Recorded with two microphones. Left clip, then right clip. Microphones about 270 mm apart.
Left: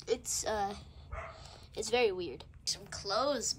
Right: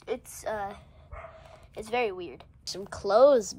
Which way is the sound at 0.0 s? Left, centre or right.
Centre.